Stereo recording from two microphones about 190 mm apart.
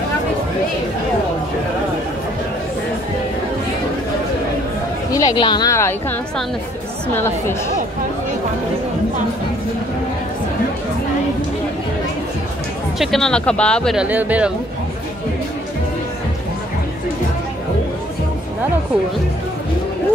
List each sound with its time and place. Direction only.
5.1 s speech: 20° left (ahead or behind)
13.0 s speech: centre (ahead or behind)
14.0 s speech: 10° right (ahead or behind)